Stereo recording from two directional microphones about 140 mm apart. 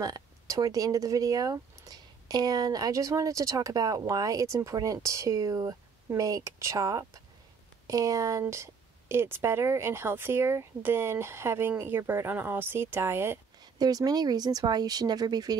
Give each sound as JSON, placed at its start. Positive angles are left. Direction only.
{"t": 0.0, "sound": "a woman's voice", "side_deg": -25}
{"t": 13.7, "sound": "speech", "side_deg": -30}